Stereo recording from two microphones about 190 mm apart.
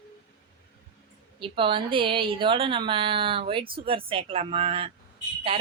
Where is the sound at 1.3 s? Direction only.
25° right (ahead or behind).